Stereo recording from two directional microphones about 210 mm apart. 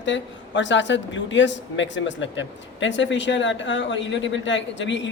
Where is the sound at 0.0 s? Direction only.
60° left (ahead or behind).